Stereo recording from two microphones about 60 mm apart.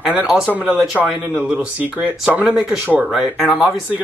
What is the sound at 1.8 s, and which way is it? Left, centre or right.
Speech, right.